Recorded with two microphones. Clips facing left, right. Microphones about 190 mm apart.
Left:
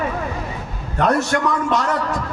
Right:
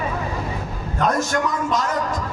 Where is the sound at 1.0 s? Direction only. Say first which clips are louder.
Left 3 dB; 65° left (ahead or behind).